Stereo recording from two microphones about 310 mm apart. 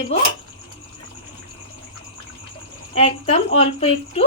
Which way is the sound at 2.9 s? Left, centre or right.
Left.